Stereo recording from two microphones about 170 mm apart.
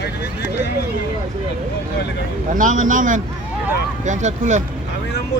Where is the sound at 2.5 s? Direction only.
50° right (ahead or behind).